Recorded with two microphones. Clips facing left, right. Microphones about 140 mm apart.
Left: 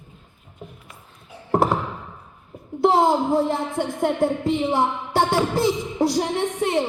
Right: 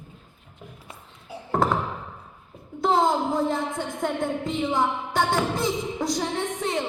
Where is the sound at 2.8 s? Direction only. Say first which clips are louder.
Left 4 dB; 25° left (ahead or behind).